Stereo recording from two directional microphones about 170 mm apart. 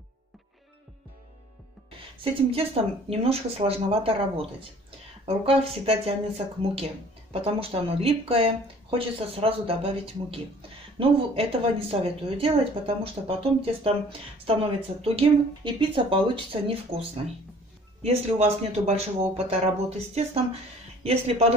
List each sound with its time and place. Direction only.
2.8 s speech: 35° right (ahead or behind)
21.0 s speech: 35° right (ahead or behind)